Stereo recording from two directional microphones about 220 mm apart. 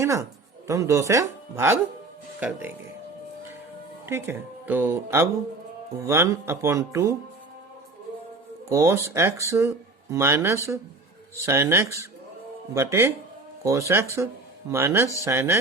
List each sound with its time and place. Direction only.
0.0 s a man's voice: 15° right (ahead or behind)
4.0 s speech: 10° right (ahead or behind)
8.7 s speech: 15° right (ahead or behind)